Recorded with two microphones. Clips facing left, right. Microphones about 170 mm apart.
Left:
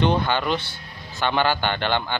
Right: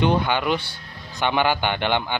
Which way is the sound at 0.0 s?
10° right (ahead or behind).